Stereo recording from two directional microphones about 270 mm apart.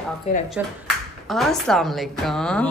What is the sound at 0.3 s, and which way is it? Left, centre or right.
Speech, left.